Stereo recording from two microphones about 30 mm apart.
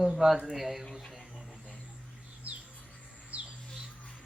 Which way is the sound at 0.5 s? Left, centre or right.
Centre.